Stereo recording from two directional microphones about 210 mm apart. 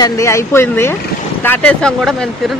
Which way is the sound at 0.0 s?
15° left (ahead or behind).